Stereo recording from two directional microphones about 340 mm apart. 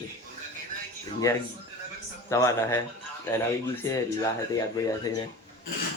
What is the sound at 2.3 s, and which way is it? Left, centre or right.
Speech, centre.